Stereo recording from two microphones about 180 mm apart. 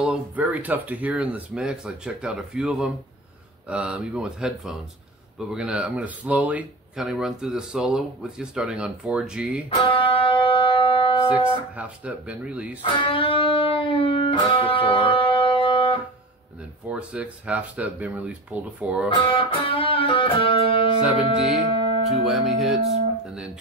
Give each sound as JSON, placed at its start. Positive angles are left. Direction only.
{"t": 0.0, "sound": "speech", "side_deg": -5}
{"t": 9.8, "sound": "music", "side_deg": 30}
{"t": 11.2, "sound": "speech", "side_deg": -5}
{"t": 12.8, "sound": "music", "side_deg": 25}
{"t": 16.9, "sound": "speech", "side_deg": -5}
{"t": 19.1, "sound": "music", "side_deg": 30}
{"t": 21.0, "sound": "speech", "side_deg": -5}